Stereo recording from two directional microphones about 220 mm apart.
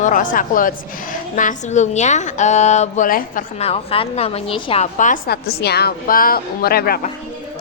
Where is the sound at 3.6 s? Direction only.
25° left (ahead or behind); by 7.1 s 45° left (ahead or behind).